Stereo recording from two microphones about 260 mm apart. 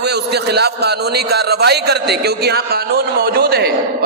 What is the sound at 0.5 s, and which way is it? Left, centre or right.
A man's voice, right.